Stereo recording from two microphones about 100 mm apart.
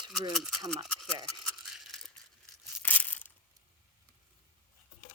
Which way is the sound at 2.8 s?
15° left (ahead or behind).